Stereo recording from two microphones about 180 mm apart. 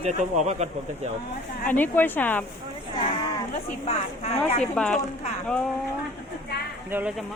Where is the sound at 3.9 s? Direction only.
35° left (ahead or behind).